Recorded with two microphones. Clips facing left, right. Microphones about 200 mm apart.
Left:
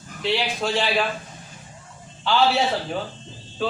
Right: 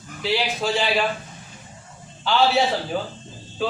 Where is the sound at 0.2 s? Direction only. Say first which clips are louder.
Even; centre (ahead or behind).